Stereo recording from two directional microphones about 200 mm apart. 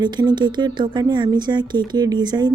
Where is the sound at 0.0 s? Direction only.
20° right (ahead or behind).